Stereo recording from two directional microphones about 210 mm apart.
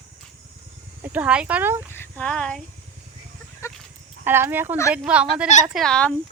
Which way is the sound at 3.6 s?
15° left (ahead or behind).